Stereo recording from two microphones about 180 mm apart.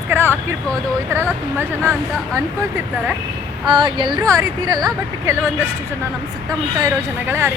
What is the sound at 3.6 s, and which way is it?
Speech, 25° right (ahead or behind).